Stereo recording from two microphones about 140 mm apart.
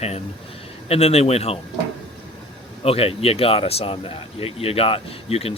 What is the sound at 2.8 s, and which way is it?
Speech, 45° left (ahead or behind).